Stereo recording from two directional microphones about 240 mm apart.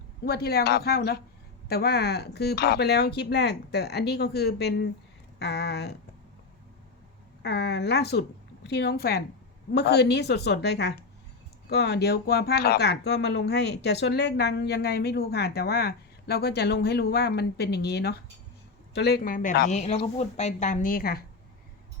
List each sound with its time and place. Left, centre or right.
0.3 s a woman's voice: left
7.4 s a woman's voice: left